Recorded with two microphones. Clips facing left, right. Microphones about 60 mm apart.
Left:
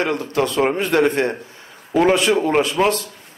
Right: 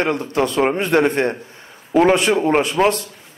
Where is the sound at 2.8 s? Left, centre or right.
Centre.